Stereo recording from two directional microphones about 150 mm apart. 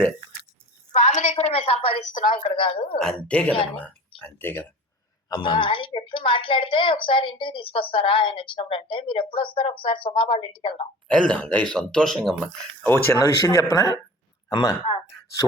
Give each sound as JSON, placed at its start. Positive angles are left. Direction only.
{"t": 0.9, "sound": "a woman's voice", "side_deg": 45}
{"t": 3.0, "sound": "speech", "side_deg": 5}
{"t": 5.3, "sound": "a woman's voice", "side_deg": 35}
{"t": 11.1, "sound": "speech", "side_deg": 5}
{"t": 12.8, "sound": "speech", "side_deg": 15}